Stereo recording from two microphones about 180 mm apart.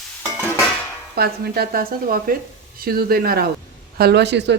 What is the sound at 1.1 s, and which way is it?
Speech, 60° right (ahead or behind).